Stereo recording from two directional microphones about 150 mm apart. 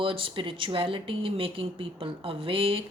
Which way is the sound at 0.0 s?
35° right (ahead or behind).